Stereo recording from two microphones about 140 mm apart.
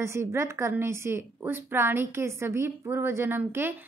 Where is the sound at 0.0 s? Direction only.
20° right (ahead or behind).